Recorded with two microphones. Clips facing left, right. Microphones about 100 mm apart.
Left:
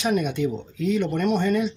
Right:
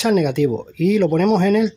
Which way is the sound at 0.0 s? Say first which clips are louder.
Right 7 dB; 85° right.